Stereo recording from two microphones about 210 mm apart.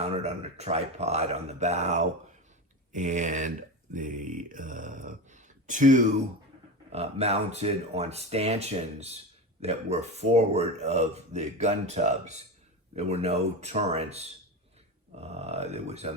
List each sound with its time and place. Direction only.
0.0 s speech: 30° right (ahead or behind)